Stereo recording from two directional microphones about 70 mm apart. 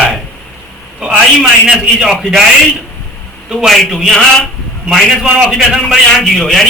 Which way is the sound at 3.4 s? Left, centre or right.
Centre.